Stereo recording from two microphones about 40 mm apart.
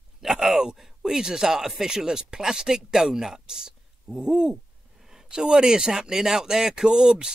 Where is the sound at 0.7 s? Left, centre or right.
Centre.